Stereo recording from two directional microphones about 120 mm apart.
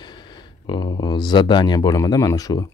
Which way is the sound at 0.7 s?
40° left (ahead or behind).